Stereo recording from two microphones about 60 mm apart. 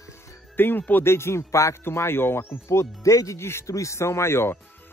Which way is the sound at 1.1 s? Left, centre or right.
Left.